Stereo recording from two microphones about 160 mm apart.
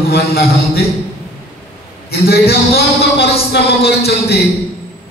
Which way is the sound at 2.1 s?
80° left.